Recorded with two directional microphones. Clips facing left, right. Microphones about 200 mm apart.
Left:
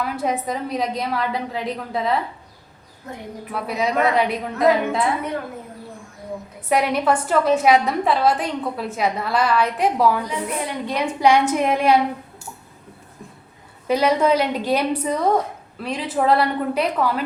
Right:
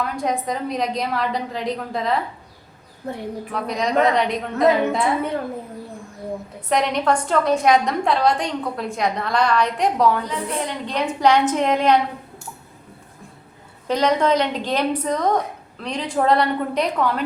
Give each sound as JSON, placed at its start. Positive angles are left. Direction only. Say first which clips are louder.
{"t": 0.0, "sound": "a woman's voice", "louder": "even", "side_deg": 5}
{"t": 3.0, "sound": "a woman's voice", "louder": "right 6 dB", "side_deg": -30}
{"t": 3.5, "sound": "a woman's voice", "louder": "right 1 dB", "side_deg": 5}
{"t": 6.7, "sound": "a woman's voice", "louder": "left 1 dB", "side_deg": 5}
{"t": 13.8, "sound": "a woman's voice", "louder": "left 1 dB", "side_deg": 10}